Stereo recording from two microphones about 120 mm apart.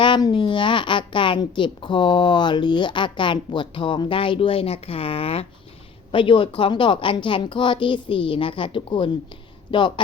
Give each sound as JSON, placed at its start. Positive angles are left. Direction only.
{"t": 0.0, "sound": "a woman's voice", "side_deg": 40}